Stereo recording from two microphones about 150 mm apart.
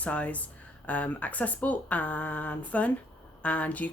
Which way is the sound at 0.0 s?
10° left (ahead or behind).